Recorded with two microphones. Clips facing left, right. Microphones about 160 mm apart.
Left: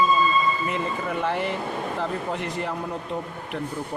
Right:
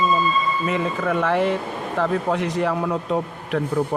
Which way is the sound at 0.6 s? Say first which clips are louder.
Right 5 dB; 90° right.